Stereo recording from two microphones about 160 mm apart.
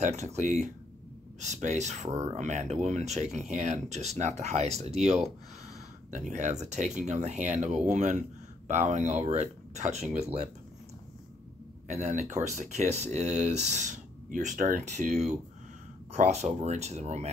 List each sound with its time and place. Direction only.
0.0 s speech: 45° right (ahead or behind)
6.3 s speech: 45° right (ahead or behind)
11.9 s speech: 45° right (ahead or behind)